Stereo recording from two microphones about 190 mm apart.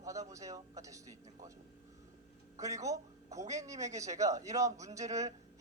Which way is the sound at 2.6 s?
15° right (ahead or behind).